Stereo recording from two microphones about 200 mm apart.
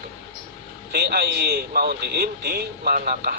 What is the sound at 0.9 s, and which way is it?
A man's voice, 55° right (ahead or behind).